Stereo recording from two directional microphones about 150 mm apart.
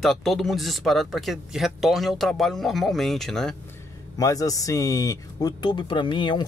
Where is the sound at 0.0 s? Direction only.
Centre (ahead or behind).